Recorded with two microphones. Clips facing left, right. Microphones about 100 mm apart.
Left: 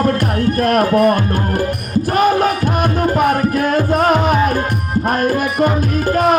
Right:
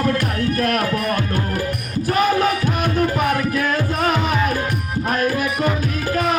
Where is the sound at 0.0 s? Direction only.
40° left (ahead or behind).